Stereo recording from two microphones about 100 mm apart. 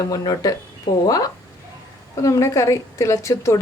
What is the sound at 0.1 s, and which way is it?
A woman's voice, 35° left (ahead or behind).